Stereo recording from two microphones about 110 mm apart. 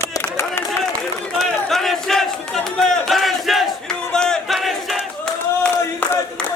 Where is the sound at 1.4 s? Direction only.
5° left (ahead or behind).